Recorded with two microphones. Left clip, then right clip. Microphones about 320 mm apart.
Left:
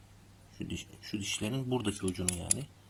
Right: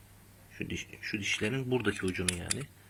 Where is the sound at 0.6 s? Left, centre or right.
Left.